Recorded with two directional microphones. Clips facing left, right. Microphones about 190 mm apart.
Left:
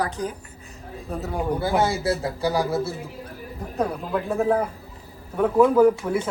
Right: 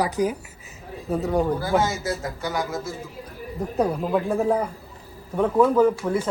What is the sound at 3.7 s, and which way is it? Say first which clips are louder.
Speech: right 3 dB; centre (ahead or behind).